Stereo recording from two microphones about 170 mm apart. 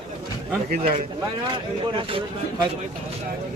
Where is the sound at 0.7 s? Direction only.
55° right (ahead or behind).